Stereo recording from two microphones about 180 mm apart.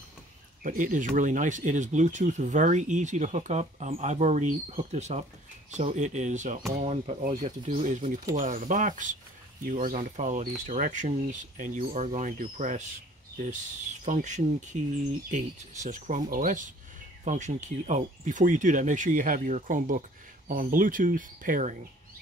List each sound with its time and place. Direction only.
0.7 s speech: 45° right (ahead or behind)